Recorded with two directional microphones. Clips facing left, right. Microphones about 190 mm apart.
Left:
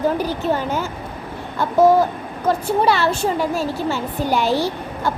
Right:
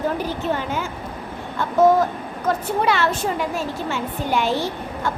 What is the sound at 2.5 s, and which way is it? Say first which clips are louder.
A woman's voice: left 3 dB; 30° left (ahead or behind).